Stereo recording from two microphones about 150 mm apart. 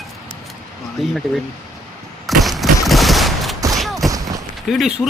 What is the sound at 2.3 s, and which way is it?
Fusillade, centre (ahead or behind).